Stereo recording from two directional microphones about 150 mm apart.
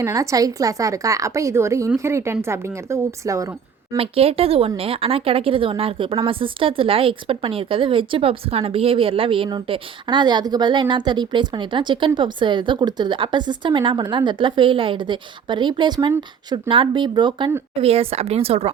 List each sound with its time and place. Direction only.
0.0 s a woman's voice: 20° right (ahead or behind)
3.9 s speech: 40° right (ahead or behind)